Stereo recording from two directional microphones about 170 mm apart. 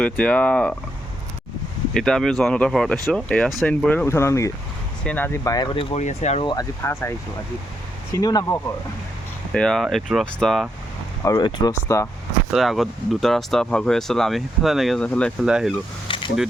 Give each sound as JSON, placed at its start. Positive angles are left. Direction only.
{"t": 0.0, "sound": "speech", "side_deg": 5}
{"t": 1.9, "sound": "speech", "side_deg": 5}
{"t": 5.7, "sound": "speech", "side_deg": 30}
{"t": 6.0, "sound": "speech", "side_deg": 45}
{"t": 6.4, "sound": "speech", "side_deg": 25}
{"t": 9.5, "sound": "speech", "side_deg": 5}
{"t": 11.2, "sound": "speech", "side_deg": 20}
{"t": 12.5, "sound": "speech", "side_deg": 0}
{"t": 15.4, "sound": "speech", "side_deg": -5}
{"t": 16.0, "sound": "a sound", "side_deg": 30}